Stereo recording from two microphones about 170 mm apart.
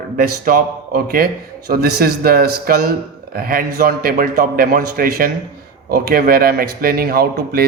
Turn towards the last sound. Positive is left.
turn(degrees=-65)  # may be behind; listen again after turning